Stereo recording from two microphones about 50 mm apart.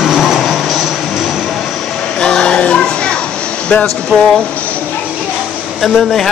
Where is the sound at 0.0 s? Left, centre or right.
Centre.